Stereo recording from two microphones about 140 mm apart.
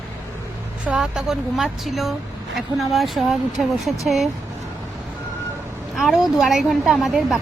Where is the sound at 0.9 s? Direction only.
5° right (ahead or behind).